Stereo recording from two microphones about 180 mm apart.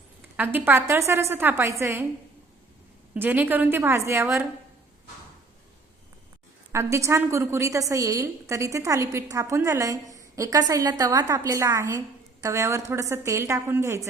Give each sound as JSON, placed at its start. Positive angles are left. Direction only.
{"t": 0.3, "sound": "a woman's voice", "side_deg": -10}
{"t": 3.2, "sound": "a woman's voice", "side_deg": -10}
{"t": 6.7, "sound": "a woman's voice", "side_deg": -15}